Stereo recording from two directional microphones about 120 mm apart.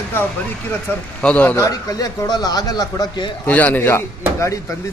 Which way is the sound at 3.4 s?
15° left (ahead or behind).